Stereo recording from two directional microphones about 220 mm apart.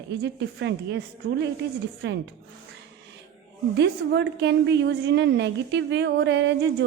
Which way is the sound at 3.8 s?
55° right (ahead or behind).